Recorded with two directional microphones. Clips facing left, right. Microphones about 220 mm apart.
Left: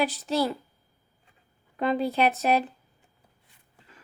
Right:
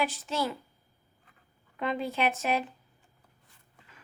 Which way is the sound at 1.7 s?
35° left (ahead or behind).